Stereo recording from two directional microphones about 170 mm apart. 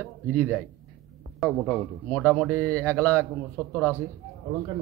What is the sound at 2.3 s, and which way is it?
Speech, 15° right (ahead or behind).